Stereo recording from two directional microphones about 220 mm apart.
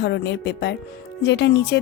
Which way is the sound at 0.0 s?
50° left (ahead or behind).